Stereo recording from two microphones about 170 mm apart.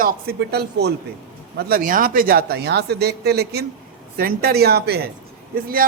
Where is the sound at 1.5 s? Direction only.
55° right (ahead or behind).